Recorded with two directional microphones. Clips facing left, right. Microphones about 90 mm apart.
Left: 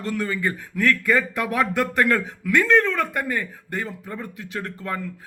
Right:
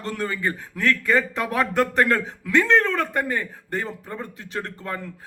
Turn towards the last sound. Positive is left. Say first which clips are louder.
# left 1 dB
turn(degrees=-30)  # may be behind; listen again after turning